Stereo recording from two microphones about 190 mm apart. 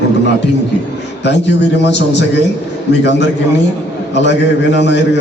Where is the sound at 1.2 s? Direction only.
65° left (ahead or behind).